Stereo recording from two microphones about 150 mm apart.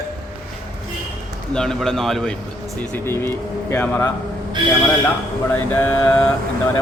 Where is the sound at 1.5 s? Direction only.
5° left (ahead or behind).